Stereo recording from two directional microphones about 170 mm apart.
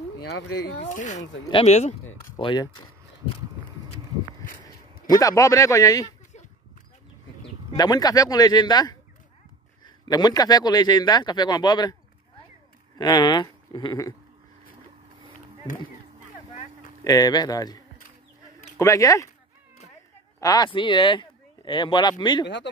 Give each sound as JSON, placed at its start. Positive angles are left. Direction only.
{"t": 0.8, "sound": "speech", "side_deg": 45}
{"t": 1.5, "sound": "a man's voice", "side_deg": 30}
{"t": 5.1, "sound": "a man's voice", "side_deg": 20}
{"t": 7.7, "sound": "a man's voice", "side_deg": 25}
{"t": 12.9, "sound": "speech", "side_deg": 25}
{"t": 17.0, "sound": "a man's voice", "side_deg": 20}
{"t": 20.3, "sound": "a man's voice", "side_deg": 20}